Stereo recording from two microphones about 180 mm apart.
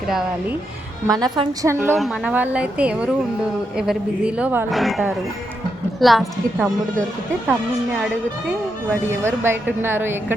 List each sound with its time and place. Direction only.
1.0 s a woman's voice: 20° right (ahead or behind); by 7.0 s centre (ahead or behind)
8.9 s a woman's voice: 10° right (ahead or behind)